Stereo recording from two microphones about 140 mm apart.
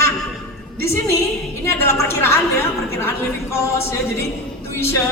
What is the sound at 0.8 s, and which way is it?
A woman's voice, 20° left (ahead or behind).